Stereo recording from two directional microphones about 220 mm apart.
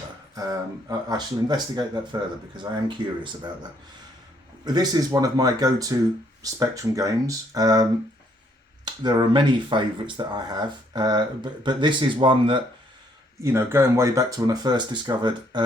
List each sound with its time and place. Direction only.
0.3 s speech: 15° right (ahead or behind)
3.0 s speech: 20° right (ahead or behind)
4.6 s speech: 20° right (ahead or behind)